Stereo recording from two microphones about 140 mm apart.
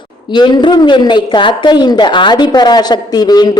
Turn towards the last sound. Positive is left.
turn(degrees=30)  # may be behind; listen again after turning